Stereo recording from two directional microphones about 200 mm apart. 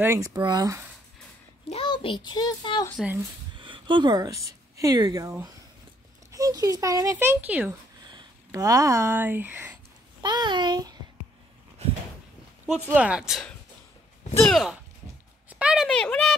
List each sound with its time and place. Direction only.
0.0 s a child's voice: 15° right (ahead or behind)
1.7 s a child's voice: 25° left (ahead or behind)
3.0 s a child's voice: 10° right (ahead or behind)
3.5 s a child's voice: 25° right (ahead or behind); by 7.7 s 10° right (ahead or behind)
8.1 s speech: 20° right (ahead or behind)
10.2 s a child's voice: 20° right (ahead or behind)
12.6 s speech: 5° right (ahead or behind)
15.5 s a sound: 5° right (ahead or behind)